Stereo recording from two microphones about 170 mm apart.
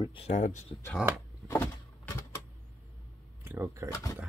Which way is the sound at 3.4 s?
15° right (ahead or behind).